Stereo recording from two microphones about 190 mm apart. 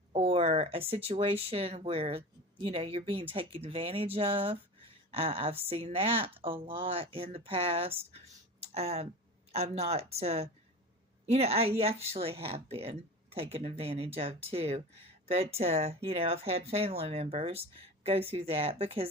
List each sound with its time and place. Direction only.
0.1 s speech: 30° right (ahead or behind)